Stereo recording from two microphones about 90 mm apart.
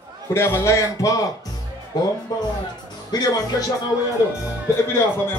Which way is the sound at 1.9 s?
50° left (ahead or behind).